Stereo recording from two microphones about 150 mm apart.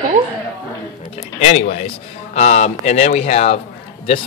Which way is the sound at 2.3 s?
50° left (ahead or behind).